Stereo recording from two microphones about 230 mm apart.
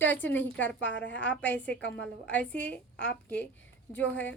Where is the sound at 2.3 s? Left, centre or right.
Centre.